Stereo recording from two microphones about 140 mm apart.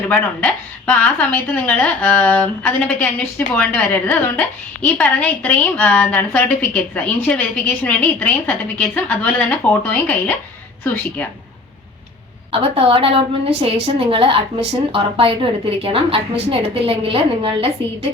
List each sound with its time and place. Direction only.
0.1 s a woman's voice: 10° left (ahead or behind)
12.5 s a woman's voice: 40° right (ahead or behind)